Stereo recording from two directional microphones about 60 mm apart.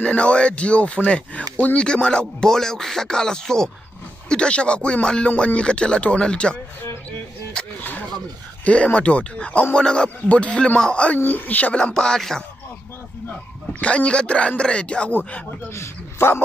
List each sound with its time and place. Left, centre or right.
0.0 s speech: centre
8.6 s speech: left
11.2 s speech: left
11.8 s speech: centre
13.7 s speech: centre
15.7 s a man's voice: left